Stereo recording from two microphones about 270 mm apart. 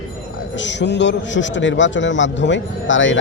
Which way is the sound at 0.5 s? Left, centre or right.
Left.